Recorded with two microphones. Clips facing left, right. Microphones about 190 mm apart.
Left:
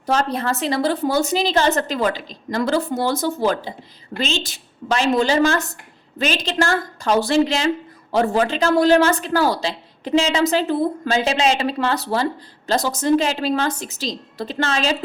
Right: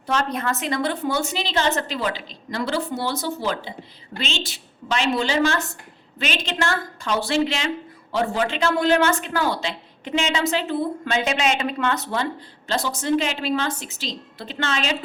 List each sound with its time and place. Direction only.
0.0 s a woman's voice: 40° left (ahead or behind)